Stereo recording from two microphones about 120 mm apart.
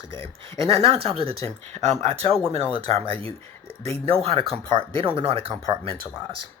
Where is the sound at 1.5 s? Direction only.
65° right (ahead or behind).